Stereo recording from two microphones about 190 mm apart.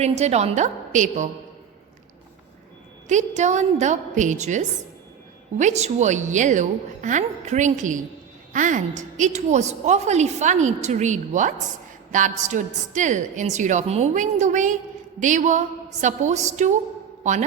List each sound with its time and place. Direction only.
0.0 s a woman's voice: 35° right (ahead or behind)
3.1 s a woman's voice: 40° right (ahead or behind)